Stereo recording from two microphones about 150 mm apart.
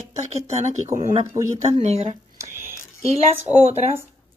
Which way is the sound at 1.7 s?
45° right (ahead or behind).